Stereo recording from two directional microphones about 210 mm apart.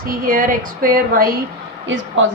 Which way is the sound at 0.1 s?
40° right (ahead or behind).